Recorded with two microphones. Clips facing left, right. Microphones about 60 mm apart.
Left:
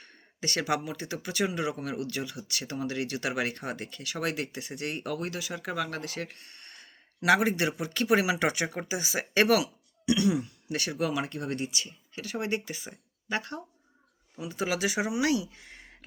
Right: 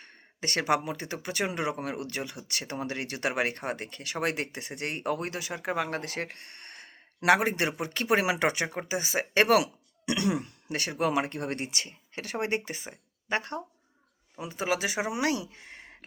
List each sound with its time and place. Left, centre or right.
0.0 s speech: right
6.3 s a sound: right
7.3 s speech: right
10.1 s throat clearing: right
10.7 s speech: right